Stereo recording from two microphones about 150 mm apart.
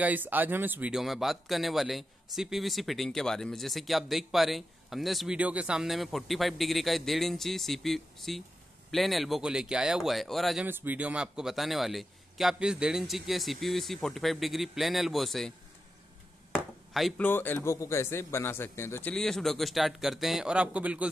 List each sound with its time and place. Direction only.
0.0 s speech: 10° right (ahead or behind)
10.7 s speech: 10° right (ahead or behind)
16.5 s a sound: centre (ahead or behind)
17.2 s speech: 10° left (ahead or behind); by 21.1 s 10° right (ahead or behind)